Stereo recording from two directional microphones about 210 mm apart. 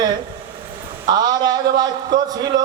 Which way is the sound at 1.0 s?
20° right (ahead or behind).